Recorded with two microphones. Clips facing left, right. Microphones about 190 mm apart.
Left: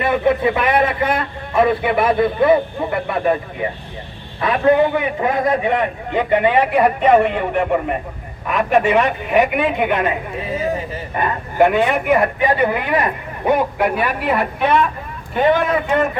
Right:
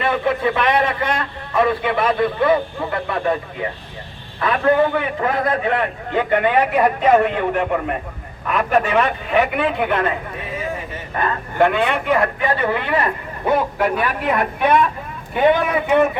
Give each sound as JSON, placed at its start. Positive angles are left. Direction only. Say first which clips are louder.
{"t": 0.0, "sound": "a man's voice", "louder": "left 3 dB", "side_deg": 20}
{"t": 0.6, "sound": "a sound", "louder": "left 2 dB", "side_deg": 10}
{"t": 1.6, "sound": "a man's voice", "louder": "left 3 dB", "side_deg": 20}
{"t": 4.4, "sound": "a man's voice", "louder": "left 2 dB", "side_deg": 20}